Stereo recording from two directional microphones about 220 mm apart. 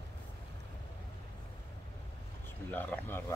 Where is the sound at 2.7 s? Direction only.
10° left (ahead or behind).